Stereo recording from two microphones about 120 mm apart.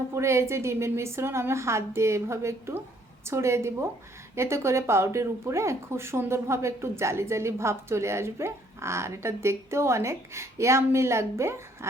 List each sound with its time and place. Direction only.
0.1 s speech: 25° right (ahead or behind)